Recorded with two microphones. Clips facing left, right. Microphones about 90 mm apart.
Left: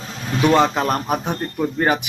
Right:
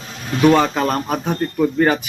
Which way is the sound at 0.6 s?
20° left (ahead or behind).